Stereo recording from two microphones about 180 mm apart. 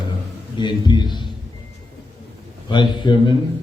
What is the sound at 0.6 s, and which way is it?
Speech, 25° left (ahead or behind).